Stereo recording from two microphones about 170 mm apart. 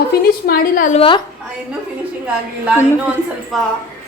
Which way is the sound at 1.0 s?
30° left (ahead or behind).